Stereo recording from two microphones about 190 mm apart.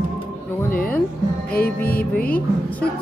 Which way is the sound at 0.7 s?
50° left (ahead or behind).